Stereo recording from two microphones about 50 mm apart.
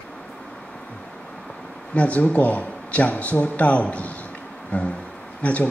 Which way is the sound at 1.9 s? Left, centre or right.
Left.